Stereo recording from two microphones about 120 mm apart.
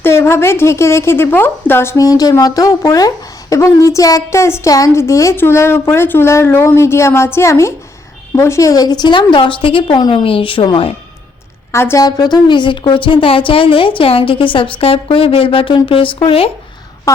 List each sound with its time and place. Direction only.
0.0 s a woman's voice: 20° left (ahead or behind); by 10.9 s 45° left (ahead or behind)
11.7 s a woman's voice: 20° left (ahead or behind)
12.0 s speech: 35° left (ahead or behind); by 16.5 s 50° left (ahead or behind)